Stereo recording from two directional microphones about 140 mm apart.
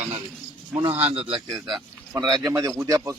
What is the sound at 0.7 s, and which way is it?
A man's voice, 40° right (ahead or behind).